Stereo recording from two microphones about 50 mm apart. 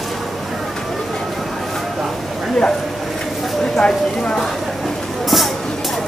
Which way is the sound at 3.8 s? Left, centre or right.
Centre.